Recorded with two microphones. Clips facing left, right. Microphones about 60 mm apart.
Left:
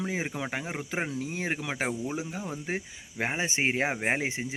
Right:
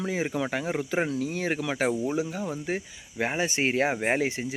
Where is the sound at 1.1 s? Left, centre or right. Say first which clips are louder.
Right 4 dB; left.